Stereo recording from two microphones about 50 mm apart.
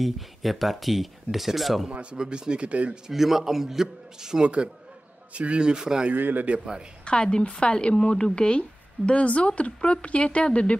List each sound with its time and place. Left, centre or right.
0.0 s speech: centre
1.9 s speech: right
3.1 s a man's voice: centre
5.3 s a man's voice: right
6.1 s a man's voice: right
6.4 s a man's voice: centre
7.1 s a woman's voice: centre